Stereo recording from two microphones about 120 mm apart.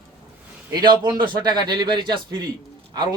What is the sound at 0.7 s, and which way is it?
A man's voice, 35° right (ahead or behind).